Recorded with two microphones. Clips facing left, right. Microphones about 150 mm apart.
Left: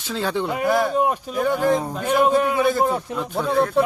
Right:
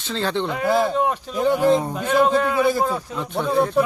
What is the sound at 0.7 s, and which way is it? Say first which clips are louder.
Speech: right 1 dB; 15° right (ahead or behind).